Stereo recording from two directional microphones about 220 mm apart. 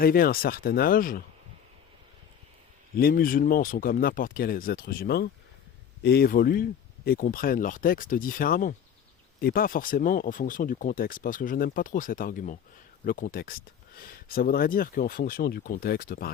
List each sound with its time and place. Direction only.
0.0 s speech: 40° left (ahead or behind)
3.0 s speech: 40° left (ahead or behind)